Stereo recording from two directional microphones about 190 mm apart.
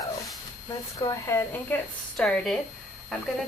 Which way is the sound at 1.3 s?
15° left (ahead or behind).